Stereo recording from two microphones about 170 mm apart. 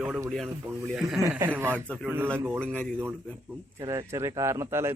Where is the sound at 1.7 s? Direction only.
5° left (ahead or behind).